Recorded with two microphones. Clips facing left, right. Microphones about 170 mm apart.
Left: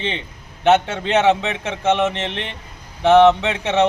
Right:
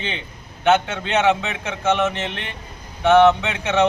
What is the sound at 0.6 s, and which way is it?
A man's voice, 30° left (ahead or behind).